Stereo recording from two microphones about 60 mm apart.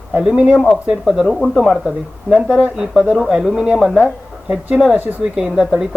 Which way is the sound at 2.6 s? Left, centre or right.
Centre.